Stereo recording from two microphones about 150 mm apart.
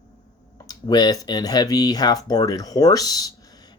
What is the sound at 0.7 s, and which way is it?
Speech, 25° left (ahead or behind).